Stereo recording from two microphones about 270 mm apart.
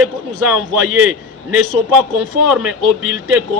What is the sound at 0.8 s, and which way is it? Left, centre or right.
Speech, right.